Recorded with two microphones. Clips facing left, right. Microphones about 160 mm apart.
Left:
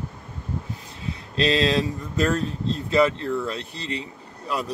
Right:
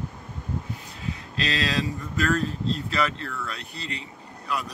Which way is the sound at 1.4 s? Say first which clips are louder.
Left 7 dB; 30° left (ahead or behind).